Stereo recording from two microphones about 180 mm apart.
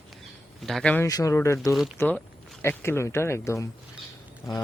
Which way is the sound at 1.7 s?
Centre (ahead or behind).